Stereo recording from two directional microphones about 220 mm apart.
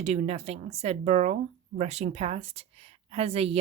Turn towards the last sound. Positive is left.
turn(degrees=-25)  # may be behind; listen again after turning